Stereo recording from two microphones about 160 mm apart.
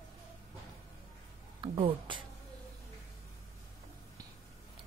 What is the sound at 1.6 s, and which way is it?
Speech, 30° right (ahead or behind).